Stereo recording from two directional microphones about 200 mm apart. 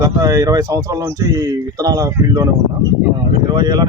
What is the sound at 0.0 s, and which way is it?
Speech, 15° right (ahead or behind).